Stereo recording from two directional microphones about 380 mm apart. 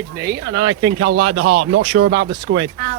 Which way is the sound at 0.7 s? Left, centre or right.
Centre.